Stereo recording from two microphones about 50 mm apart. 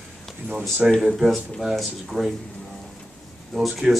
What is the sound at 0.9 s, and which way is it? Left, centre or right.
Speech, centre.